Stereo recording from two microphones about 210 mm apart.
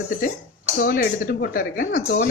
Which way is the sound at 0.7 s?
45° left (ahead or behind).